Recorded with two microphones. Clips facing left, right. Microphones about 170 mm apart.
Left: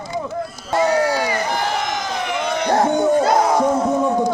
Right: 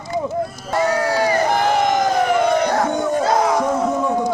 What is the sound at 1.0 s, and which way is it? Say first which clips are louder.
Crowd: right 3 dB; 40° right (ahead or behind).